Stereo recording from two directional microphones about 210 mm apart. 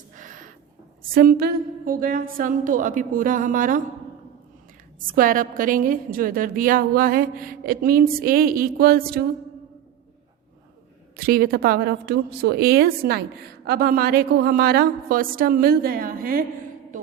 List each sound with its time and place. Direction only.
0.2 s a sound: 40° right (ahead or behind)
1.0 s a woman's voice: 40° right (ahead or behind)
4.9 s a woman's voice: 40° right (ahead or behind)
11.2 s a woman's voice: 45° right (ahead or behind)